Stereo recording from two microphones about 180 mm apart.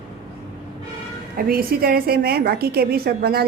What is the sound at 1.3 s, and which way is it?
A woman's voice, 55° right (ahead or behind).